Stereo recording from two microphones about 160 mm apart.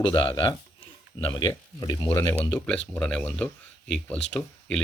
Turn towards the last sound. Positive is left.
turn(degrees=5)  # may be behind; listen again after turning